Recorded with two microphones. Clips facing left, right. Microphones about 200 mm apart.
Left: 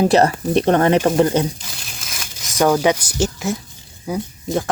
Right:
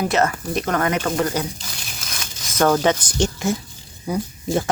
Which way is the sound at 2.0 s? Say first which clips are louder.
Even; 5° left (ahead or behind).